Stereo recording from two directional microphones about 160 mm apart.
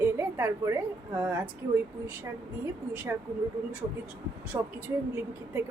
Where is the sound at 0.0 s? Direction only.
15° right (ahead or behind).